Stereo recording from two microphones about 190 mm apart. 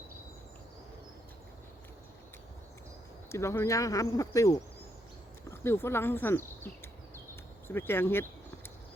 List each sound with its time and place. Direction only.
3.2 s speech: 15° left (ahead or behind)